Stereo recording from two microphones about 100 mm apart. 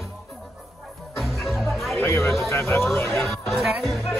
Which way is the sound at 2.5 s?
25° left (ahead or behind).